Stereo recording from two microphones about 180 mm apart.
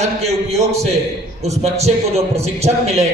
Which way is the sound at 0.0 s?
35° right (ahead or behind).